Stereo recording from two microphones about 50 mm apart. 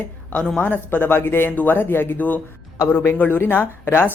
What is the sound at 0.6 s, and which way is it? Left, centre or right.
A woman's voice, left.